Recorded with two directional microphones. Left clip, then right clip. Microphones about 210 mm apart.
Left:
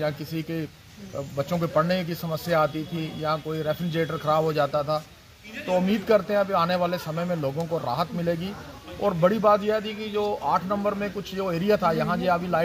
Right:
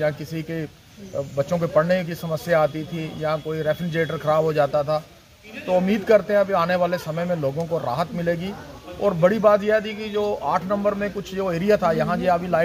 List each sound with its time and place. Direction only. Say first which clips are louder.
0.0 s a man's voice: right 4 dB; 5° right (ahead or behind)